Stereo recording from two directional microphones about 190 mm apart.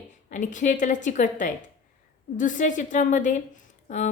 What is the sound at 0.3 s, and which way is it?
A woman's voice, 40° left (ahead or behind).